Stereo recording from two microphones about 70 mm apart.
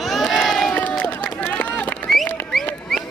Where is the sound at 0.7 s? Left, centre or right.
Left.